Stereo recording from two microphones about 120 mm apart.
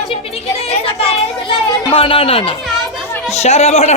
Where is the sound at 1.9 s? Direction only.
50° left (ahead or behind).